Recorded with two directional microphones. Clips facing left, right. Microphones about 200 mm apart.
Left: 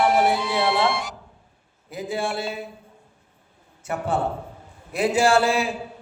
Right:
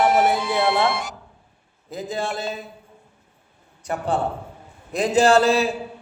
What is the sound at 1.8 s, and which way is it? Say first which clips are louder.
Speech: even; 10° left (ahead or behind).